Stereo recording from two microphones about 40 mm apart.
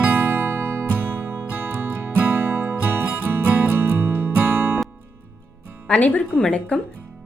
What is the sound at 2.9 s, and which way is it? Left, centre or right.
Music, right.